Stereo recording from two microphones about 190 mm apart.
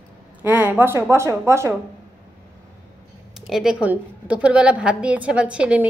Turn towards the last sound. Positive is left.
turn(degrees=-5)  # may be behind; listen again after turning